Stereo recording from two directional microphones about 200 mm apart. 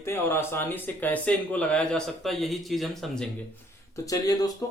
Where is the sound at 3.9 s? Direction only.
15° left (ahead or behind).